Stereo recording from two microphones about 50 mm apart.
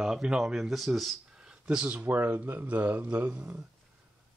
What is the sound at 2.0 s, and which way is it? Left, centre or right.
Speech, right.